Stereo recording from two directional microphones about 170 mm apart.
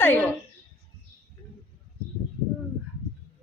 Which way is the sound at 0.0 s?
10° left (ahead or behind).